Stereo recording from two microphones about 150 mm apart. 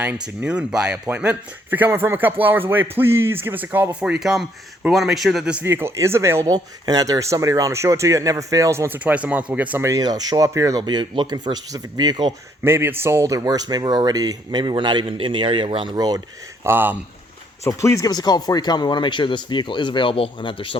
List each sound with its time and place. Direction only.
0.0 s a man's voice: 5° right (ahead or behind); by 12.3 s 30° right (ahead or behind)
12.6 s speech: 15° right (ahead or behind)
16.6 s speech: 15° right (ahead or behind)
17.6 s speech: 20° left (ahead or behind)